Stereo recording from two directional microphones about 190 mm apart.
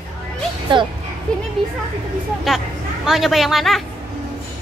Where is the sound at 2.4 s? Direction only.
Centre (ahead or behind).